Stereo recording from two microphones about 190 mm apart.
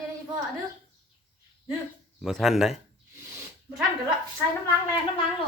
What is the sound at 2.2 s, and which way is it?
Speech, centre (ahead or behind).